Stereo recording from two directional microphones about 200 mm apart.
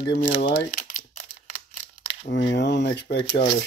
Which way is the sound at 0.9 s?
35° left (ahead or behind).